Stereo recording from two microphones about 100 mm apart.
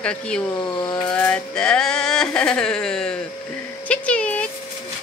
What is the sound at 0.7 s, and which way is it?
Coin, 45° left (ahead or behind).